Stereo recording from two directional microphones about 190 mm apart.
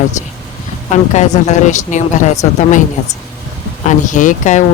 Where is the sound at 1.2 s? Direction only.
40° left (ahead or behind).